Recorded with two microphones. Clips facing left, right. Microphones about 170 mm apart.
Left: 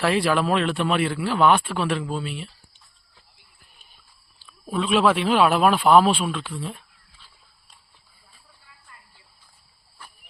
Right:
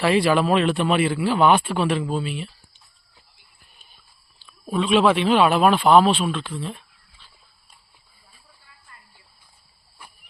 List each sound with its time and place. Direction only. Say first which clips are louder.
0.0 s a man's voice: right 3 dB; centre (ahead or behind)
4.6 s a man's voice: right 2 dB; centre (ahead or behind)